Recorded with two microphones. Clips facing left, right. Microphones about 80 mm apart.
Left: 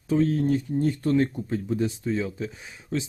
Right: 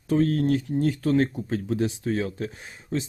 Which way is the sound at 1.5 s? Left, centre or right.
Right.